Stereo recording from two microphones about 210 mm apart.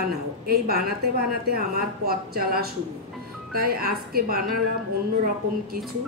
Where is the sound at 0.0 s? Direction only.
45° right (ahead or behind).